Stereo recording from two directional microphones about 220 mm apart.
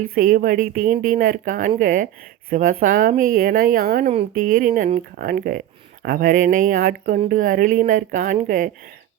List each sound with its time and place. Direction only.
0.0 s speech: 40° right (ahead or behind)